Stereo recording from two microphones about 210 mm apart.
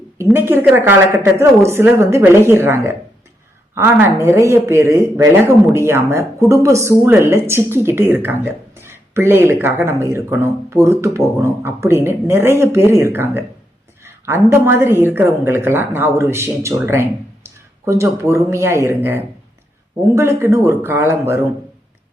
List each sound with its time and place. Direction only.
0.3 s speech: 10° right (ahead or behind)